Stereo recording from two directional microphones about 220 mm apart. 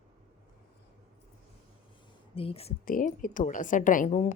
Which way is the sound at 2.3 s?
25° left (ahead or behind).